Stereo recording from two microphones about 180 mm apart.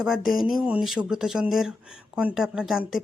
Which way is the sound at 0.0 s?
Centre (ahead or behind).